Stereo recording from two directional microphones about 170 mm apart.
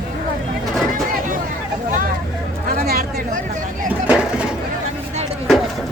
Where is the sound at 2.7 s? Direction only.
60° right (ahead or behind).